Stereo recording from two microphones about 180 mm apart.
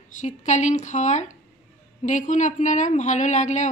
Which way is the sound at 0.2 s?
40° left (ahead or behind).